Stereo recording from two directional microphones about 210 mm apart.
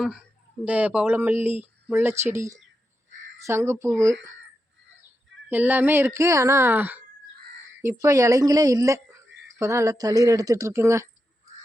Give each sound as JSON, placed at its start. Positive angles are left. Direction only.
{"t": 0.6, "sound": "a woman's voice", "side_deg": -5}
{"t": 5.5, "sound": "a woman's voice", "side_deg": -10}